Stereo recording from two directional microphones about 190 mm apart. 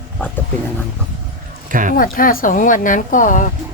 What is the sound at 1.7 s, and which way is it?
Speech, 45° right (ahead or behind).